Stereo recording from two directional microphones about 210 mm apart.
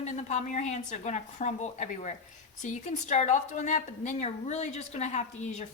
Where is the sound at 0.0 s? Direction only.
35° left (ahead or behind).